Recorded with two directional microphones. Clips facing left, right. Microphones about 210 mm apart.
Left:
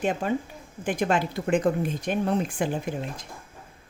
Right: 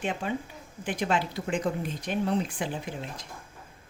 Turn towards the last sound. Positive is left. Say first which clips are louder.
# left 5 dB
turn(degrees=50)  # may be behind; listen again after turning